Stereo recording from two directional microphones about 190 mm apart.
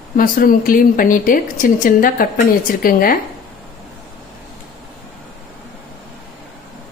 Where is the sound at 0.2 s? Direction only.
50° left (ahead or behind).